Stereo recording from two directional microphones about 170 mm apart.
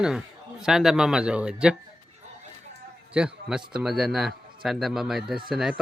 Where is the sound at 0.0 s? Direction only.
5° right (ahead or behind).